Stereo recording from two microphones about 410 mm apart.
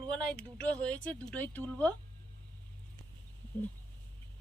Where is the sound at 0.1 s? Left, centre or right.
Centre.